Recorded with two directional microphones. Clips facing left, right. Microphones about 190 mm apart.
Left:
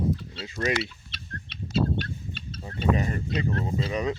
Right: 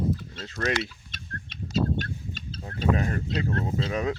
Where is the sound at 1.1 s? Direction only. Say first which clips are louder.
Even; 45° right (ahead or behind).